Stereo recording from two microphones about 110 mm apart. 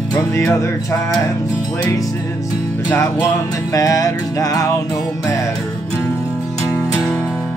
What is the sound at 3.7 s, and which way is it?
Music, 30° left (ahead or behind).